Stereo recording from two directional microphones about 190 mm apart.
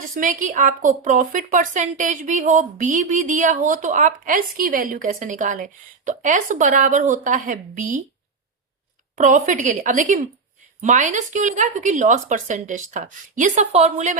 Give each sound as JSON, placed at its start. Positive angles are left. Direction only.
{"t": 0.1, "sound": "a woman's voice", "side_deg": -45}
{"t": 9.1, "sound": "a woman's voice", "side_deg": -40}